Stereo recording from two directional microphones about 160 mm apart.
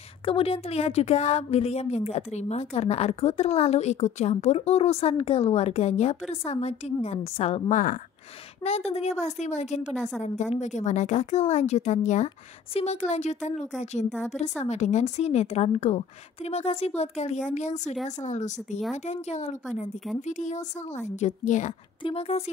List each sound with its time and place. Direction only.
0.2 s a woman's voice: 35° left (ahead or behind)
9.9 s a woman's voice: centre (ahead or behind)
10.2 s a woman's voice: 45° left (ahead or behind)
14.0 s a woman's voice: centre (ahead or behind)
14.6 s a woman's voice: 45° left (ahead or behind)
22.0 s a woman's voice: 40° left (ahead or behind)